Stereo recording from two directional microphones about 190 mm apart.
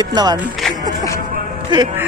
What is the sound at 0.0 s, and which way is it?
Speech, 20° right (ahead or behind).